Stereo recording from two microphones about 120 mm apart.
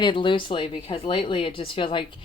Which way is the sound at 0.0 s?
45° left (ahead or behind).